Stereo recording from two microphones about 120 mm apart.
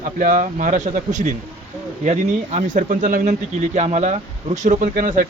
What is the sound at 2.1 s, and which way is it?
Speech, 75° right (ahead or behind).